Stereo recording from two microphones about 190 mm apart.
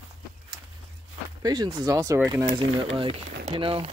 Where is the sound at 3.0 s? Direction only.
30° right (ahead or behind).